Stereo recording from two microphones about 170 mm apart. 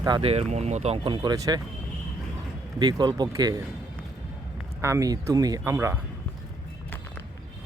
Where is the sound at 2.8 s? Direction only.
25° right (ahead or behind).